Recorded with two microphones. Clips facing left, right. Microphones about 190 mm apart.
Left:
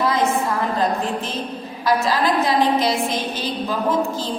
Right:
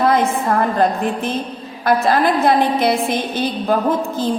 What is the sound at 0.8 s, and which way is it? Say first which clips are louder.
A woman's voice: right 4 dB; 60° right (ahead or behind).